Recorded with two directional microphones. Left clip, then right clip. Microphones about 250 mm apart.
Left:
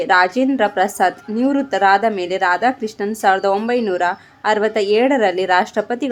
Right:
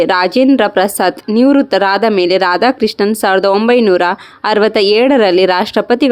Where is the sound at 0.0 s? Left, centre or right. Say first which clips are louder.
Right 4 dB; right.